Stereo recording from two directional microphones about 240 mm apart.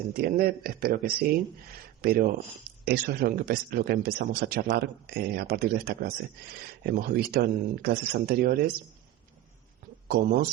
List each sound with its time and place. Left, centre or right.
0.1 s speech: right
10.1 s speech: right